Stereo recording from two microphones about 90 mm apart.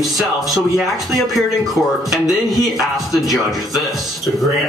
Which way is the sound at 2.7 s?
Centre (ahead or behind).